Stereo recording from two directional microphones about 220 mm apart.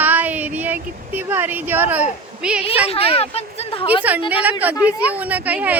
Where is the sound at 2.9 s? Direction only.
25° left (ahead or behind).